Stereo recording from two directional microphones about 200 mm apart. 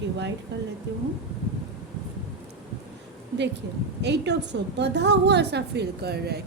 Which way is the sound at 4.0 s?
60° right (ahead or behind).